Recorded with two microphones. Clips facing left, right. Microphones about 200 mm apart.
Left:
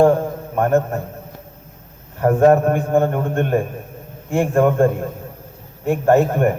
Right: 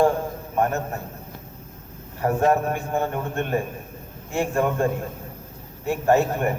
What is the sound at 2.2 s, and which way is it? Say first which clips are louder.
A man's voice: left 7 dB; 50° left (ahead or behind).